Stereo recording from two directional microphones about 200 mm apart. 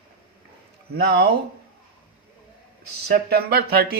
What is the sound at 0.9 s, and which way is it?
Speech, 55° right (ahead or behind).